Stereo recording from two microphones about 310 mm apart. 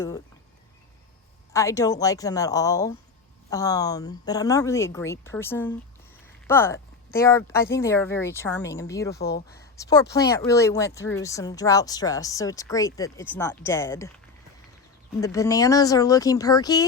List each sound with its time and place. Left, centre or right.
1.5 s speech: centre
9.1 s speech: left
9.6 s speech: centre
15.2 s speech: centre